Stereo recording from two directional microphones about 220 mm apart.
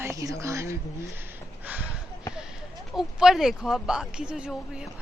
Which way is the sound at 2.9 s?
Centre (ahead or behind).